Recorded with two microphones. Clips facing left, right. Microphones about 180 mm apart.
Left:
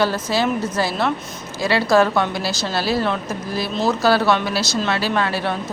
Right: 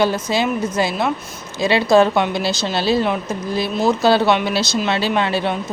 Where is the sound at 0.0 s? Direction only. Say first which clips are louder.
Right 1 dB; 20° right (ahead or behind).